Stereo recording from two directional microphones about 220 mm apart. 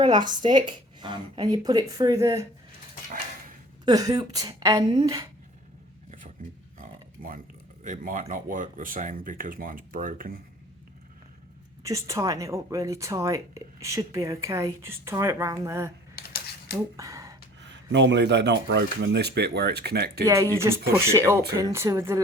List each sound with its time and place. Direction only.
0.0 s speech: 20° right (ahead or behind)
3.8 s speech: 15° right (ahead or behind)
6.1 s a sound: 35° right (ahead or behind)
7.9 s speech: 40° right (ahead or behind)
11.8 s speech: 15° right (ahead or behind)
16.1 s a sound: 45° left (ahead or behind)
16.7 s speech: 15° right (ahead or behind)
17.7 s speech: 55° right (ahead or behind)
20.2 s speech: 15° right (ahead or behind)